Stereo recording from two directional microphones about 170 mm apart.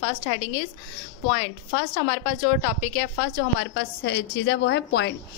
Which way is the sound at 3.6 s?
80° left.